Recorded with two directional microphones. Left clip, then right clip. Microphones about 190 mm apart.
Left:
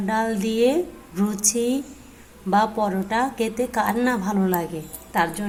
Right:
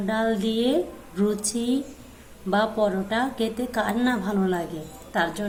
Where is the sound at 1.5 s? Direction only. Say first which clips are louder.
Left 4 dB; 40° left (ahead or behind).